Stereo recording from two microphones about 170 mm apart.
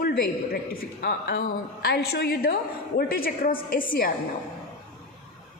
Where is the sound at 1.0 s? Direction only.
75° left (ahead or behind).